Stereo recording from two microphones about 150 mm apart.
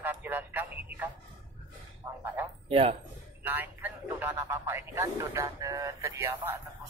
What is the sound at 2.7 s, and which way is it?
Speech, 40° right (ahead or behind).